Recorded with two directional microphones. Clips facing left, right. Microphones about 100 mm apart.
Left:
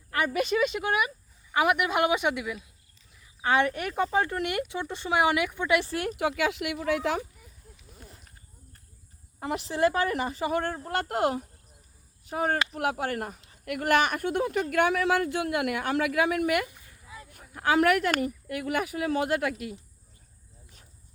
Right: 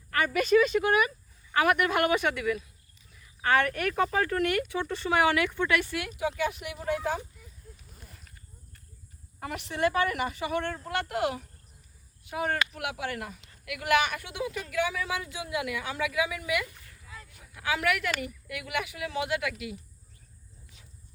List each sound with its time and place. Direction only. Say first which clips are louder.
0.8 s a man's voice: right 3 dB; 15° left (ahead or behind)
5.8 s speech: left 4 dB; 40° left (ahead or behind)
6.1 s speech: left 2 dB; 80° left
9.4 s speech: left 3 dB; 30° left (ahead or behind); by 16.6 s 60° left (ahead or behind)
16.6 s a sound: left 1 dB; 15° left (ahead or behind)
17.3 s speech: left 8 dB; 45° left (ahead or behind)